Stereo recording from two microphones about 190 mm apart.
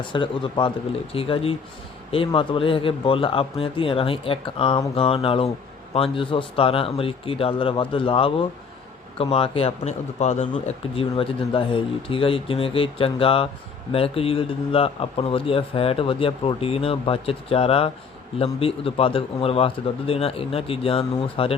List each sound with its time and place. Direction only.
0.0 s speech: 25° left (ahead or behind)